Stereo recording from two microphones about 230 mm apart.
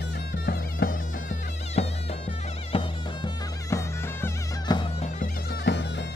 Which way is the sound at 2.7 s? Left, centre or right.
Left.